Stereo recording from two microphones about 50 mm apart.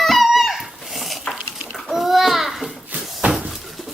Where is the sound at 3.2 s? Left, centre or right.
Centre.